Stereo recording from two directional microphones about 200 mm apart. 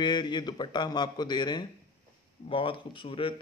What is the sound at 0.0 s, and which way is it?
Speech, 20° left (ahead or behind).